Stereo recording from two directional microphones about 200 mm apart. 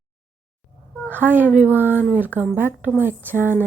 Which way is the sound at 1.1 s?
10° right (ahead or behind).